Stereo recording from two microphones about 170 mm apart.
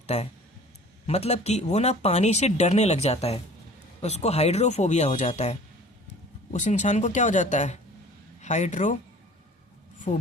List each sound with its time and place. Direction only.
0.1 s speech: 40° left (ahead or behind)
10.1 s speech: 40° left (ahead or behind)